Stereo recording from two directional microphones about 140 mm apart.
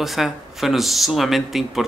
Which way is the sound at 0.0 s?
Centre (ahead or behind).